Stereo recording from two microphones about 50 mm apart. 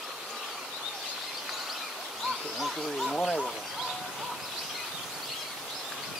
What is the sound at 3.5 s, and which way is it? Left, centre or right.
Bird, centre.